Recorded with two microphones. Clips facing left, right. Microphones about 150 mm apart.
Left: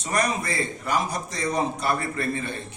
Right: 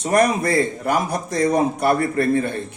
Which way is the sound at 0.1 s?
55° right (ahead or behind).